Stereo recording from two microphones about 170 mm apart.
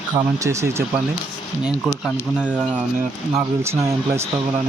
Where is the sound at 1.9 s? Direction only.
15° left (ahead or behind).